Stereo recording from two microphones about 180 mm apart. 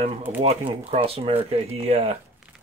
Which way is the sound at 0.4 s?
35° right (ahead or behind).